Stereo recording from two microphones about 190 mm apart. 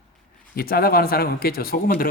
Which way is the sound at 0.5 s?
50° left (ahead or behind).